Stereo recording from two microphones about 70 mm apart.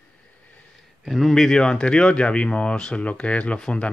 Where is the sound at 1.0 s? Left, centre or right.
Centre.